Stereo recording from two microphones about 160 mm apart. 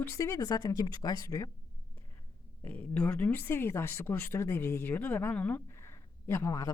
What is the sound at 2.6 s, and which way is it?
A woman's voice, 10° left (ahead or behind).